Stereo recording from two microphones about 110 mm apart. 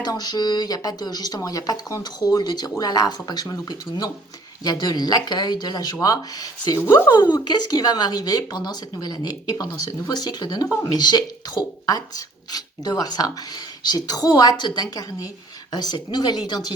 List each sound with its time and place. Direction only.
0.0 s speech: 35° left (ahead or behind)